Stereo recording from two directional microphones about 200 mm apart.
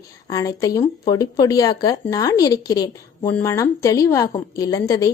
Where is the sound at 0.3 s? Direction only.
15° left (ahead or behind).